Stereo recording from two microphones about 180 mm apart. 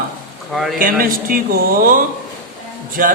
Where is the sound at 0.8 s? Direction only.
50° right (ahead or behind).